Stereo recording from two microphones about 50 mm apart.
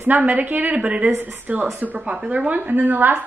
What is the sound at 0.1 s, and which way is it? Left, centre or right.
A woman's voice, right.